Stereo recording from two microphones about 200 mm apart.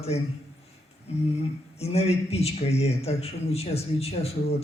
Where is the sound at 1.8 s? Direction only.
30° left (ahead or behind).